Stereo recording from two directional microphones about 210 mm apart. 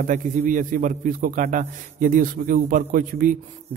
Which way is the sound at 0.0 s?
35° right (ahead or behind).